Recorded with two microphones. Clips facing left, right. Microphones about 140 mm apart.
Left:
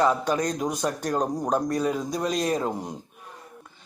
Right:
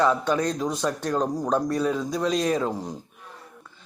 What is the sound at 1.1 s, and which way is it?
Speech, 15° left (ahead or behind).